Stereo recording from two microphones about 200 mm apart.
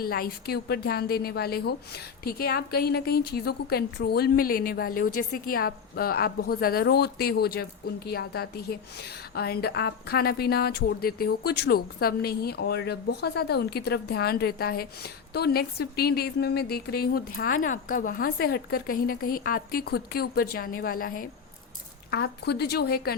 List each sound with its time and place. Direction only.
0.0 s a woman's voice: 50° left (ahead or behind)